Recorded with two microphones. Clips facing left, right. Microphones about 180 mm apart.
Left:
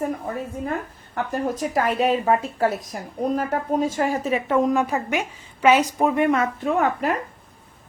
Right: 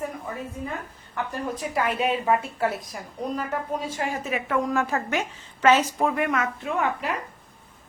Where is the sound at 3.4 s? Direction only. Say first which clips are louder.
Left 7 dB; 45° left (ahead or behind).